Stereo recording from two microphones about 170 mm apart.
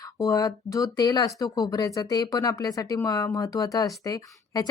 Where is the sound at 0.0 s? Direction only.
20° left (ahead or behind).